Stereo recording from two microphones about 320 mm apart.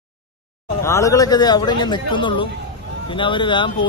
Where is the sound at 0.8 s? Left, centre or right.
Centre.